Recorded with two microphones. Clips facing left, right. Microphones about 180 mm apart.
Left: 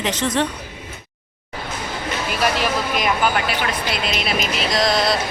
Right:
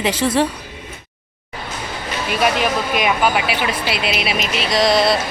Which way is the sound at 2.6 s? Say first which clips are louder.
Right 2 dB; 5° right (ahead or behind).